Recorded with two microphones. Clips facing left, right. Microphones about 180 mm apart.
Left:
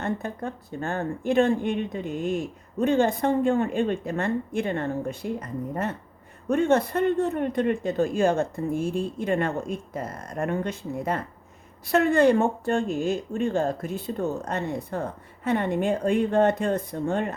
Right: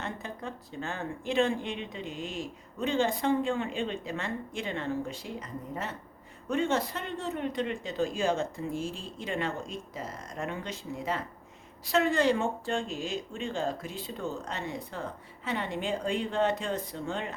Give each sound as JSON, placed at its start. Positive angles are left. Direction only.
{"t": 0.0, "sound": "speech", "side_deg": 50}